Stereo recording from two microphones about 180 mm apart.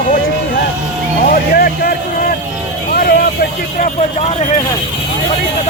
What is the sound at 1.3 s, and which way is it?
Speech, 55° left (ahead or behind).